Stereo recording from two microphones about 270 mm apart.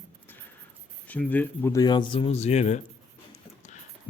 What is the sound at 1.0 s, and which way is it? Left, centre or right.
Speech, centre.